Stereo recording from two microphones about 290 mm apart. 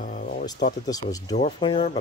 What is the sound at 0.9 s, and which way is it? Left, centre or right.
Speech, centre.